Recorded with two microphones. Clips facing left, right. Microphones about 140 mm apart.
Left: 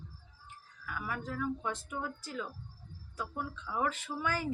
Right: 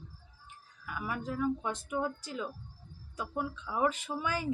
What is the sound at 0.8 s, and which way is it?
A woman's voice, 15° right (ahead or behind).